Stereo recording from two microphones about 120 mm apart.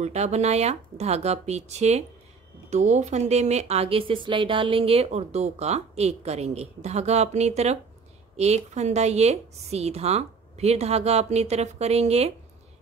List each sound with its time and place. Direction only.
0.0 s speech: 65° right (ahead or behind)